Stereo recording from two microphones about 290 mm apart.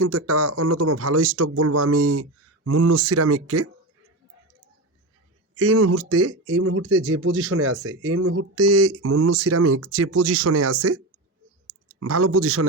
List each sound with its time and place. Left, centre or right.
0.0 s speech: right
5.5 s speech: right